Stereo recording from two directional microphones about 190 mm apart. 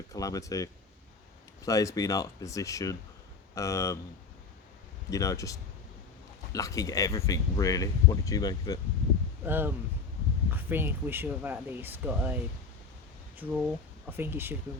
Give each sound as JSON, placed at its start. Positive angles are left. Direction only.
{"t": 0.1, "sound": "speech", "side_deg": 20}
{"t": 5.1, "sound": "speech", "side_deg": 15}
{"t": 9.4, "sound": "speech", "side_deg": -10}